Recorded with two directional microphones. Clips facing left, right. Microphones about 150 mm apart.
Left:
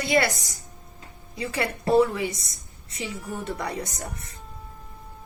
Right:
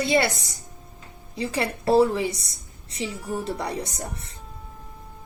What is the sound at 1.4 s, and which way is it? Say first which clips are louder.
Speech: right 2 dB; 30° right (ahead or behind).